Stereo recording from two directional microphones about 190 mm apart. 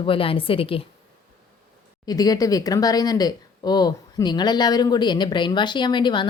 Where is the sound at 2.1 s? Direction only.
20° left (ahead or behind).